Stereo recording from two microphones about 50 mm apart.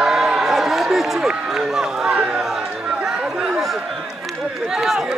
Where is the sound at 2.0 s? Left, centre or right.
Centre.